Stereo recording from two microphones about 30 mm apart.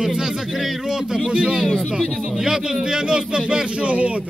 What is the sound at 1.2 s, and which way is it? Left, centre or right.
Speech, right.